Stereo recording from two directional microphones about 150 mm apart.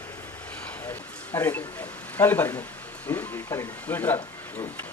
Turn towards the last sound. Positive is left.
turn(degrees=10)  # may be behind; listen again after turning